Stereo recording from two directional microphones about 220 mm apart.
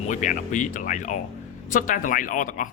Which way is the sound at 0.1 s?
35° left (ahead or behind).